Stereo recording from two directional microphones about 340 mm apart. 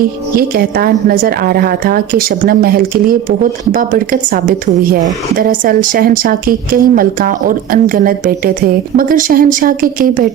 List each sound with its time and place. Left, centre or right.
0.3 s a woman's voice: right